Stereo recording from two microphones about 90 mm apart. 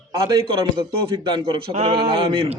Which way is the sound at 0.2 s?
50° right (ahead or behind).